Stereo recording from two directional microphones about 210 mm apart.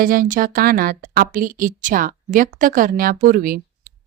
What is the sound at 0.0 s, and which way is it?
A woman's voice, 40° right (ahead or behind).